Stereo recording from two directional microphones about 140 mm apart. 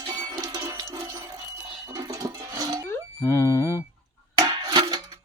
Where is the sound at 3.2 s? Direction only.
20° left (ahead or behind).